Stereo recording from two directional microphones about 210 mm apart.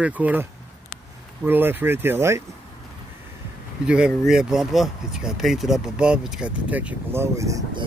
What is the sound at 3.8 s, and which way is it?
Speech, 5° right (ahead or behind).